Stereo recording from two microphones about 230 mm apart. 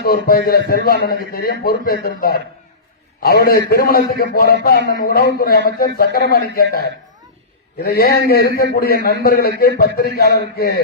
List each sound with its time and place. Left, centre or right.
0.0 s a man's voice: left